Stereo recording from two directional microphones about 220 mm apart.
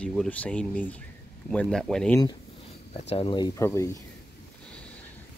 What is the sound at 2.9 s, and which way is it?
Speech, 25° left (ahead or behind).